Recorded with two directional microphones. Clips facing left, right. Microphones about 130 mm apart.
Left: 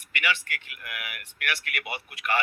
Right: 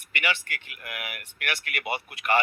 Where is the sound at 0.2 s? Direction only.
25° right (ahead or behind).